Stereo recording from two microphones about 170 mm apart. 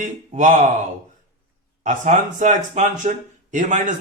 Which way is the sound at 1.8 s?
50° right (ahead or behind).